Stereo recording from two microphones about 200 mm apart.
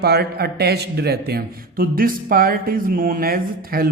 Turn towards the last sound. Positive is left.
turn(degrees=-50)  # may be behind; listen again after turning